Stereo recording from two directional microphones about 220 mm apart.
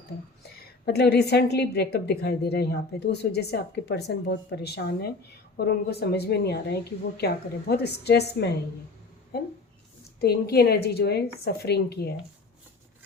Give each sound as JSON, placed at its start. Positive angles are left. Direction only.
{"t": 0.9, "sound": "a woman's voice", "side_deg": 50}